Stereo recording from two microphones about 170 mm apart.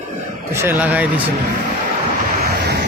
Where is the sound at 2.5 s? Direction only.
70° right (ahead or behind).